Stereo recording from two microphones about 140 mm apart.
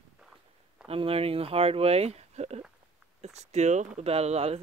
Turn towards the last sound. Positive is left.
turn(degrees=-45)  # may be behind; listen again after turning